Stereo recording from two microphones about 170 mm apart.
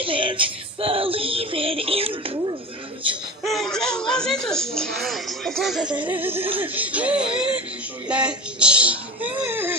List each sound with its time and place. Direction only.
0.0 s child singing: 30° right (ahead or behind)
3.4 s speech: centre (ahead or behind)